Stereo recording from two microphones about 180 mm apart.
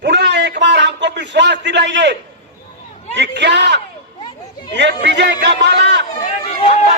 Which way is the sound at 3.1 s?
75° right (ahead or behind).